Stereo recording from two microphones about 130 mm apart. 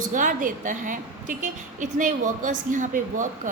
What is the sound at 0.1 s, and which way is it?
A woman's voice, 90° right.